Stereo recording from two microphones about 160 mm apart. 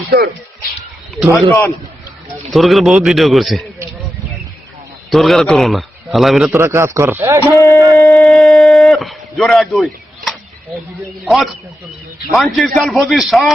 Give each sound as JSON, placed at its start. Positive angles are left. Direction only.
{"t": 1.3, "sound": "a man's voice", "side_deg": 15}
{"t": 2.5, "sound": "a man's voice", "side_deg": 0}
{"t": 5.1, "sound": "a man's voice", "side_deg": 0}
{"t": 6.5, "sound": "speech", "side_deg": -20}
{"t": 7.5, "sound": "speech", "side_deg": 20}
{"t": 7.9, "sound": "shofar", "side_deg": 20}
{"t": 8.2, "sound": "a sound", "side_deg": 0}
{"t": 12.3, "sound": "a man's voice", "side_deg": 0}